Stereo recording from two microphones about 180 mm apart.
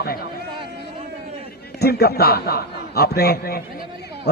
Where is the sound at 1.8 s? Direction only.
60° left (ahead or behind).